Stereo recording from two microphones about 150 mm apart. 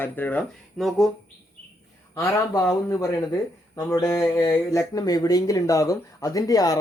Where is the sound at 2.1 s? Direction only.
20° left (ahead or behind).